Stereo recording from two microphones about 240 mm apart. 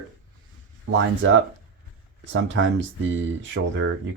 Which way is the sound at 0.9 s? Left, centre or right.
Right.